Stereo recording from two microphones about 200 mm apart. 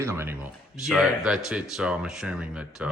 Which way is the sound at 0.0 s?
10° right (ahead or behind).